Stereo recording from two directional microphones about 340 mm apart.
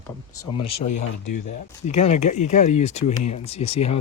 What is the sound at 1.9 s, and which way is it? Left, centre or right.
Speech, centre.